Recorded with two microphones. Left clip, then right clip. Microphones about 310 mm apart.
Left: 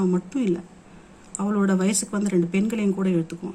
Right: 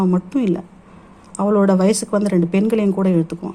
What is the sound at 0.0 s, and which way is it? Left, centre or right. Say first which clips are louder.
Speech: right 5 dB; centre.